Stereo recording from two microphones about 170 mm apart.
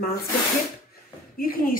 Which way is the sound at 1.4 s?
55° left (ahead or behind).